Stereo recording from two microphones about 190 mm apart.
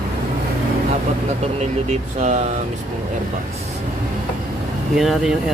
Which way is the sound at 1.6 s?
35° right (ahead or behind).